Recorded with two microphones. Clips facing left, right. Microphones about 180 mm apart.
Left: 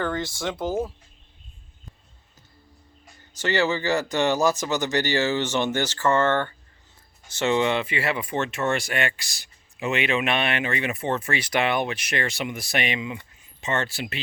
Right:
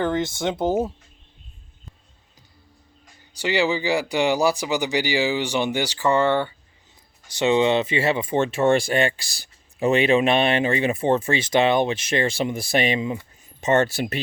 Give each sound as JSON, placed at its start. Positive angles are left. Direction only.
{"t": 0.0, "sound": "speech", "side_deg": -20}
{"t": 3.3, "sound": "speech", "side_deg": -15}